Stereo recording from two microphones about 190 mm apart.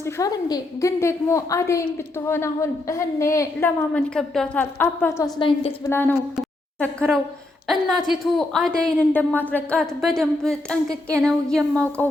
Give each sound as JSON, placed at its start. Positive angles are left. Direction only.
{"t": 0.0, "sound": "a woman's voice", "side_deg": 20}
{"t": 5.4, "sound": "a woman's voice", "side_deg": 25}
{"t": 5.9, "sound": "a woman's voice", "side_deg": 10}